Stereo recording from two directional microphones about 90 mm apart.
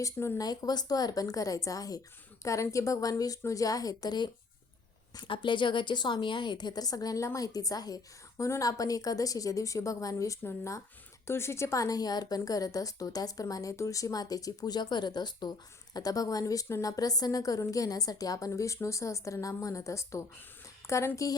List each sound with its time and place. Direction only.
0.0 s a woman's voice: 35° left (ahead or behind)
0.4 s a woman's voice: 50° left (ahead or behind)
5.3 s a woman's voice: 65° left (ahead or behind); by 21.1 s 35° left (ahead or behind)